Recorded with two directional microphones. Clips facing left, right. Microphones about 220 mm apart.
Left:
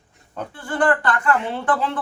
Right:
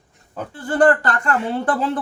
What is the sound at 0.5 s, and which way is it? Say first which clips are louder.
Speech: right 5 dB; 40° right (ahead or behind).